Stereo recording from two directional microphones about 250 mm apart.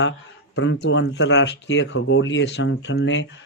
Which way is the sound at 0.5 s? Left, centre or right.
Left.